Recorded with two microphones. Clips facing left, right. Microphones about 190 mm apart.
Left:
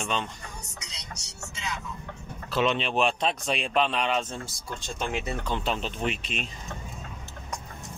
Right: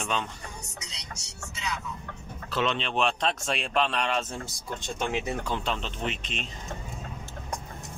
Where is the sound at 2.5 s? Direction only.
10° left (ahead or behind).